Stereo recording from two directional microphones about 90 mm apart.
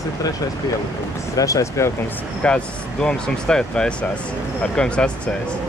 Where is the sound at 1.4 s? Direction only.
35° left (ahead or behind).